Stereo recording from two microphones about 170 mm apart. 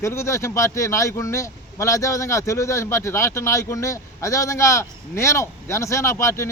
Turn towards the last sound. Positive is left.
turn(degrees=15)  # may be behind; listen again after turning